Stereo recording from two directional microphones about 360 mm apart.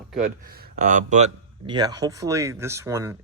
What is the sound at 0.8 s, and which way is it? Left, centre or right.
Speech, right.